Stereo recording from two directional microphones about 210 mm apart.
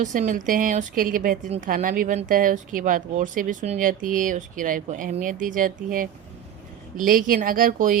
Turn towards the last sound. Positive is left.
turn(degrees=-40)  # may be behind; listen again after turning